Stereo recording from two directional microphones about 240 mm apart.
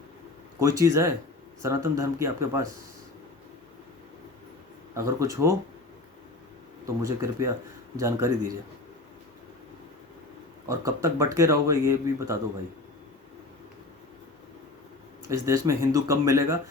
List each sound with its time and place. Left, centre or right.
0.6 s speech: centre
4.9 s speech: centre
7.0 s speech: centre
10.7 s speech: centre
15.3 s speech: centre